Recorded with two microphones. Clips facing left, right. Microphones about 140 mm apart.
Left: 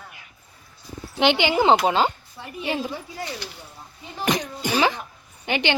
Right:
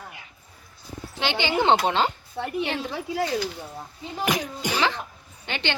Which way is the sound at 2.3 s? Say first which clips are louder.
Right 8 dB; 65° right (ahead or behind).